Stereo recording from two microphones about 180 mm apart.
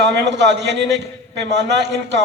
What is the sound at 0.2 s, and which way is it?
A man's voice, 70° right (ahead or behind).